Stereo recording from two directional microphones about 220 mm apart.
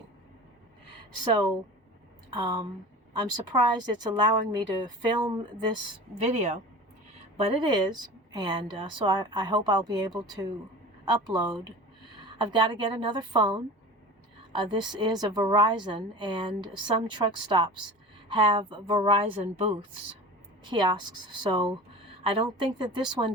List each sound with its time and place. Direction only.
2.3 s a woman's voice: 20° right (ahead or behind)